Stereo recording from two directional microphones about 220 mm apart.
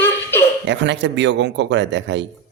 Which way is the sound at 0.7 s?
55° right (ahead or behind).